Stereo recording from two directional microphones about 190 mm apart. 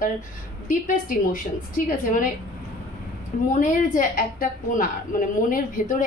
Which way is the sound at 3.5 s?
45° left (ahead or behind).